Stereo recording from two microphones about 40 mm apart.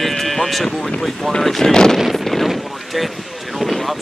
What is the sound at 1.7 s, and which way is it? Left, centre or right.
Speech, centre.